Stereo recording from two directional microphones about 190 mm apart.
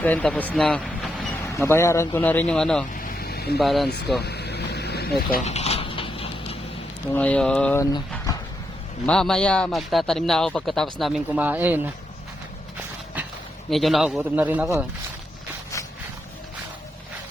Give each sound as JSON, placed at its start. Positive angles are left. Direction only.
{"t": 0.0, "sound": "speech", "side_deg": 5}
{"t": 1.4, "sound": "speech", "side_deg": 15}
{"t": 2.9, "sound": "vehicle", "side_deg": 50}
{"t": 3.6, "sound": "speech", "side_deg": 0}
{"t": 4.2, "sound": "vehicle", "side_deg": 60}
{"t": 5.5, "sound": "a sound", "side_deg": 35}
{"t": 7.1, "sound": "speech", "side_deg": 5}
{"t": 9.0, "sound": "speech", "side_deg": 5}
{"t": 13.7, "sound": "speech", "side_deg": 0}
{"t": 15.7, "sound": "a sound", "side_deg": 15}